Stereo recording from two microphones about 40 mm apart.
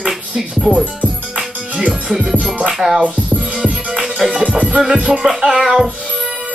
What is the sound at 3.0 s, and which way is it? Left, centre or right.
Speech, right.